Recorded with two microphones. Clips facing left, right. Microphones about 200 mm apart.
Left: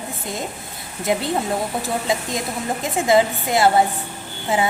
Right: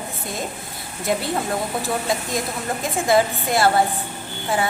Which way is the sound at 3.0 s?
20° left (ahead or behind).